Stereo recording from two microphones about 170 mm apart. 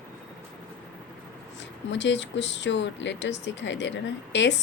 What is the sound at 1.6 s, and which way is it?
Speech, 90° left.